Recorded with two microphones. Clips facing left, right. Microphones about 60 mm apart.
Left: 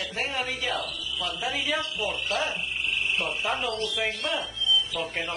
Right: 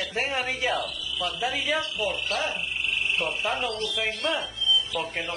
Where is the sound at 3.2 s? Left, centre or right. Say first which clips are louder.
Right 1 dB; centre.